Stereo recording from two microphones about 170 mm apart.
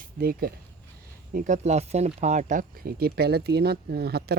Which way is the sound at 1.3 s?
50° right (ahead or behind).